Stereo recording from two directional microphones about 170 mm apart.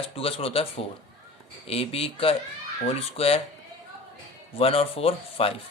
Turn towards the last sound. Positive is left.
turn(degrees=35)  # may be behind; listen again after turning